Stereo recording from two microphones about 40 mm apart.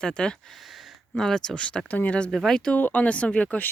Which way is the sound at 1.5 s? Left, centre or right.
Left.